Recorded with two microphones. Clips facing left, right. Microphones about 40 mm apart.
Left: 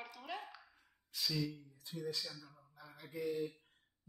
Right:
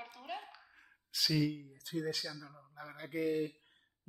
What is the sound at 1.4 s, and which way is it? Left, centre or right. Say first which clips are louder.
Speech: right 7 dB; right.